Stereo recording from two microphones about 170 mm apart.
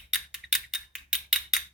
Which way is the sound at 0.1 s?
Centre (ahead or behind).